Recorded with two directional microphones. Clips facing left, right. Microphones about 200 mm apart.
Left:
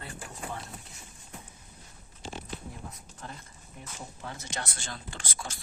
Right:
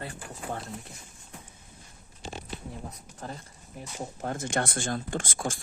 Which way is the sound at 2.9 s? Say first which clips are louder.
Right 5 dB; 35° right (ahead or behind).